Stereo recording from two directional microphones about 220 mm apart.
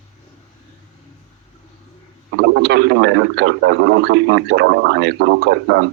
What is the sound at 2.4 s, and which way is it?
A man's voice, 50° right (ahead or behind).